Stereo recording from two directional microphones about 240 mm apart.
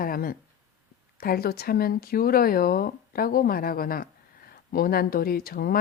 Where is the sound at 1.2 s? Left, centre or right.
Left.